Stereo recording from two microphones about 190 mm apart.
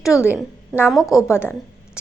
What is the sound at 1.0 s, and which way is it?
Speech, 15° left (ahead or behind).